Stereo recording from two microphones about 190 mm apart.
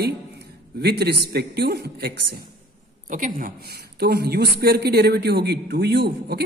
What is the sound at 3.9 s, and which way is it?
A man's voice, 60° right (ahead or behind).